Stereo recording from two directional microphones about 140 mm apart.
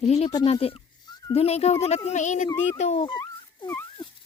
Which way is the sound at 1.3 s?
50° left (ahead or behind).